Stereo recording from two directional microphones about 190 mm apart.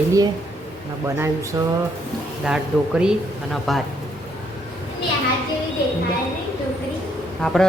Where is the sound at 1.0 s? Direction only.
15° right (ahead or behind).